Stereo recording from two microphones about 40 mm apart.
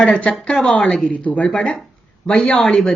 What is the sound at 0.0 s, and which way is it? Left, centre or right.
Speech, left.